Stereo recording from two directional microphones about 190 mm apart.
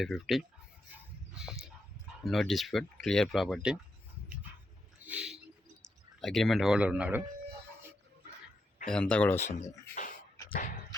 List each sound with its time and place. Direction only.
0.0 s speech: centre (ahead or behind)
1.4 s dog: 5° right (ahead or behind)
2.2 s speech: centre (ahead or behind)
5.0 s a sound: 5° right (ahead or behind)
6.1 s speech: centre (ahead or behind)
8.9 s speech: 5° left (ahead or behind)
9.4 s speech: 35° left (ahead or behind)